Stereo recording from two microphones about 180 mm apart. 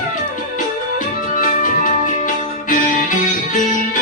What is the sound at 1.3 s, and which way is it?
Music, 50° left (ahead or behind).